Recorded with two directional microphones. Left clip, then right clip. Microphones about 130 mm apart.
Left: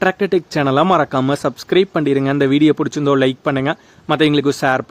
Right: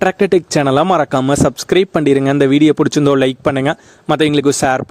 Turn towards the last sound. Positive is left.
turn(degrees=-65)  # may be behind; listen again after turning